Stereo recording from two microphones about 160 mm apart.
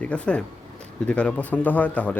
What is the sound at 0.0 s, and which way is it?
Speech, 5° left (ahead or behind).